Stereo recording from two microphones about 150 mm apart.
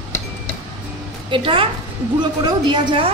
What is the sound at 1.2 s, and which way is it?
A woman's voice, 35° right (ahead or behind).